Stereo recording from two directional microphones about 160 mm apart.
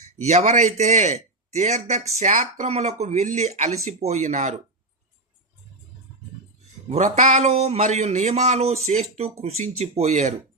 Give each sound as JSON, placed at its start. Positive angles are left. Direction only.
{"t": 0.2, "sound": "a man's voice", "side_deg": -45}
{"t": 6.9, "sound": "a man's voice", "side_deg": -50}